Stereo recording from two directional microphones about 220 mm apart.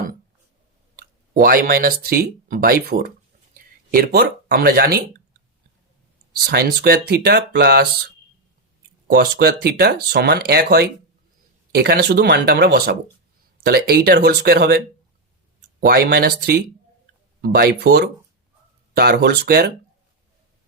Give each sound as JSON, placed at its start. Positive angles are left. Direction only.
{"t": 1.3, "sound": "speech", "side_deg": -40}
{"t": 6.3, "sound": "speech", "side_deg": -45}
{"t": 9.1, "sound": "speech", "side_deg": -45}
{"t": 15.9, "sound": "speech", "side_deg": -45}